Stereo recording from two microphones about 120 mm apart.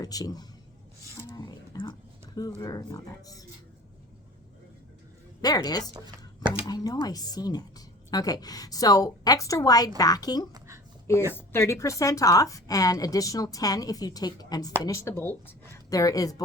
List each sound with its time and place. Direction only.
0.0 s a man's voice: 30° left (ahead or behind)
1.3 s a sound: 35° left (ahead or behind)
2.6 s a woman's voice: 35° left (ahead or behind)
5.4 s a woman's voice: 35° left (ahead or behind)
11.3 s a woman's voice: 20° left (ahead or behind)
14.8 s a woman's voice: 25° left (ahead or behind)
15.9 s a woman's voice: 30° left (ahead or behind)